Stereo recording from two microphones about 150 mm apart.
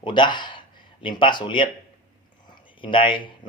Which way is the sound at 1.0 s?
30° left (ahead or behind).